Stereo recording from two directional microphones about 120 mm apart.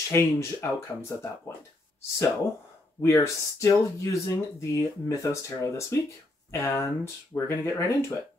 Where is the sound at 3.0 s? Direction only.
25° left (ahead or behind).